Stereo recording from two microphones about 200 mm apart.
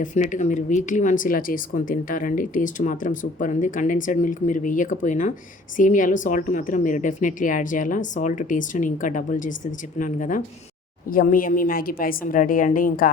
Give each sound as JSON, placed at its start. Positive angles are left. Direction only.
{"t": 0.0, "sound": "a woman's voice", "side_deg": 40}